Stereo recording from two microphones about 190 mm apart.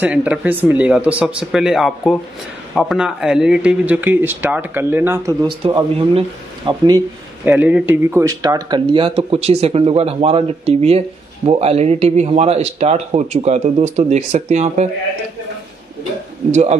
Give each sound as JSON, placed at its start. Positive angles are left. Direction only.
{"t": 0.0, "sound": "speech", "side_deg": -5}
{"t": 5.9, "sound": "speech", "side_deg": -25}
{"t": 7.4, "sound": "speech", "side_deg": -10}